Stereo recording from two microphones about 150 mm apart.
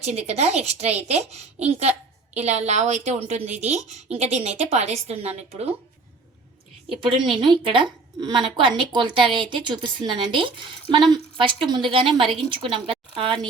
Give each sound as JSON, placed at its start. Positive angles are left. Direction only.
{"t": 0.0, "sound": "a woman's voice", "side_deg": -50}
{"t": 7.0, "sound": "a woman's voice", "side_deg": -35}